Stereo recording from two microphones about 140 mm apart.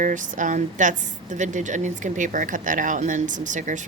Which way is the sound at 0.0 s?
65° right (ahead or behind).